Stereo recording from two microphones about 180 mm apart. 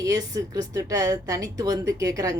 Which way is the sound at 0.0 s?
20° right (ahead or behind).